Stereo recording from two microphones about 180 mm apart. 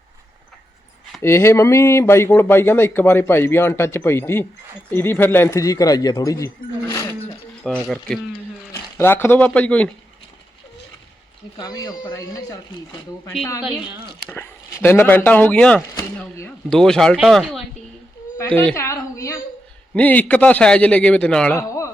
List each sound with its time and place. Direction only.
1.2 s speech: 15° left (ahead or behind)
7.6 s speech: centre (ahead or behind)
8.7 s speech: 15° left (ahead or behind)
11.5 s speech: 20° left (ahead or behind)
14.3 s speech: 10° left (ahead or behind)
18.3 s a woman's voice: 10° left (ahead or behind)